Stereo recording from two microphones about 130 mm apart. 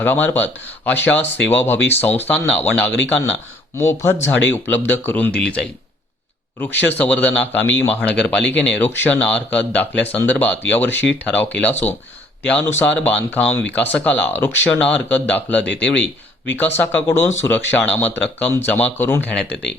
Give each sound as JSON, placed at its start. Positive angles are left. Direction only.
{"t": 0.0, "sound": "speech", "side_deg": 15}